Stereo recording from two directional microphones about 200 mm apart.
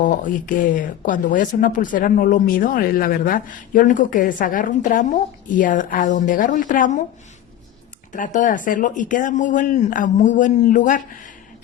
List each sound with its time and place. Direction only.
0.0 s speech: 40° left (ahead or behind)
8.1 s speech: 40° left (ahead or behind)